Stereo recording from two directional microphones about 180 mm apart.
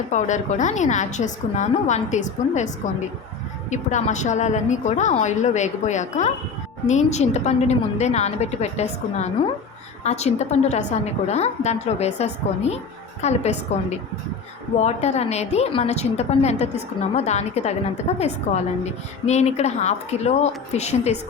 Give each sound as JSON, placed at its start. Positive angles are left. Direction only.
{"t": 0.1, "sound": "a woman's voice", "side_deg": 40}
{"t": 14.8, "sound": "a woman's voice", "side_deg": 35}